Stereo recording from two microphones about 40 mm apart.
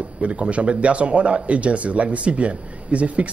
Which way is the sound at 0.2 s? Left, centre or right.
Right.